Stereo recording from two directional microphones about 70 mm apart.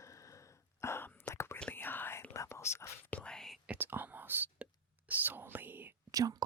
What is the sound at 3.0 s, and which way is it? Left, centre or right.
Whispering, left.